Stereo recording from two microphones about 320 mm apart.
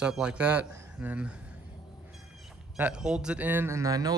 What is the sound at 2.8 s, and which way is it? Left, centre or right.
Speech, centre.